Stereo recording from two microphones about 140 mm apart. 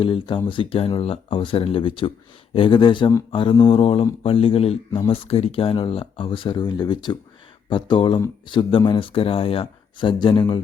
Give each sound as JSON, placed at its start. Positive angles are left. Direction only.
{"t": 0.0, "sound": "speech", "side_deg": 35}